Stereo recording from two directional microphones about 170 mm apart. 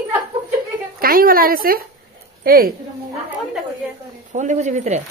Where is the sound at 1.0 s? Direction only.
60° right (ahead or behind).